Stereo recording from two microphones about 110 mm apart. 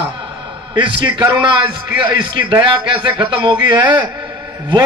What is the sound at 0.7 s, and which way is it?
A man's voice, 45° right (ahead or behind).